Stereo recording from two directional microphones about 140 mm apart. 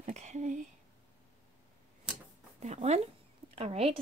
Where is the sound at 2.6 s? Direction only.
55° right (ahead or behind).